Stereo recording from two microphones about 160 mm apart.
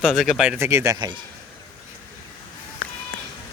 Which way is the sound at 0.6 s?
15° right (ahead or behind).